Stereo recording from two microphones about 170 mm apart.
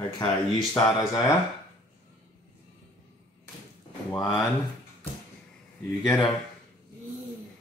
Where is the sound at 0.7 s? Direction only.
15° left (ahead or behind).